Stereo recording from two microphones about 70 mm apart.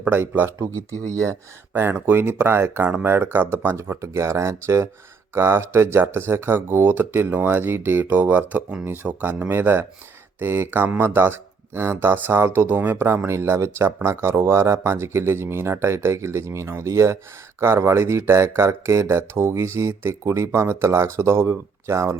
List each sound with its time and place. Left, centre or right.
0.0 s speech: right
0.9 s speech: right
1.7 s speech: right